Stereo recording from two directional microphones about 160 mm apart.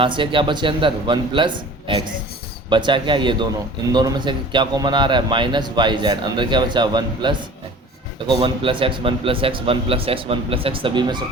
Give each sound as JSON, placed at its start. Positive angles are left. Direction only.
{"t": 0.0, "sound": "a man's voice", "side_deg": -30}